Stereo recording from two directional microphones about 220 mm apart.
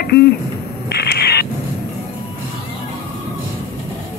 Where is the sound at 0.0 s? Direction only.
45° left (ahead or behind).